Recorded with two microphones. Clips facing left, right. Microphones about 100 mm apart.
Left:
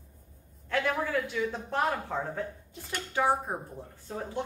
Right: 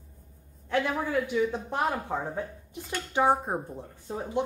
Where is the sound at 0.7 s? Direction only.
15° right (ahead or behind).